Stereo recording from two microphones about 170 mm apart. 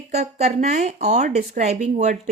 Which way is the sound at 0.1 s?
40° right (ahead or behind).